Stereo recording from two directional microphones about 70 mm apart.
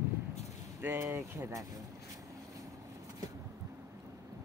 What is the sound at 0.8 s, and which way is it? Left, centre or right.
Speech, right.